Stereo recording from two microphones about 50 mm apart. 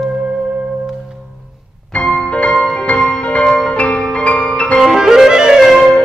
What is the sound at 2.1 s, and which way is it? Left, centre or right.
Music, left.